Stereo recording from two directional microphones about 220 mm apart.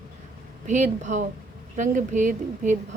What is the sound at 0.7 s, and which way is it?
Speech, 35° right (ahead or behind).